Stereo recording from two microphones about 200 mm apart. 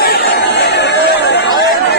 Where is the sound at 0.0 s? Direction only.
50° left (ahead or behind).